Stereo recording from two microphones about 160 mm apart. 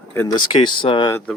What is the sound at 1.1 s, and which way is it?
Speech, 15° left (ahead or behind).